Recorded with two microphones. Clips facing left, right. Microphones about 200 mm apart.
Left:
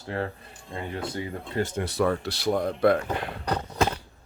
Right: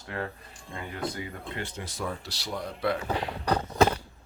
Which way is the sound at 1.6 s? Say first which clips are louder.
Left 12 dB; 60° left (ahead or behind).